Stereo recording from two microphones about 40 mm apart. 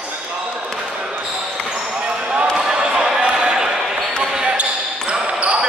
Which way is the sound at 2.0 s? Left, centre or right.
Right.